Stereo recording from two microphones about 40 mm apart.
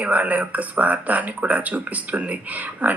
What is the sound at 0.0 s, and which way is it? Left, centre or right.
Speech, right.